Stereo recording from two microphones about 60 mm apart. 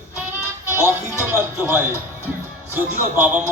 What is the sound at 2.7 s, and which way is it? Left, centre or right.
Speech, right.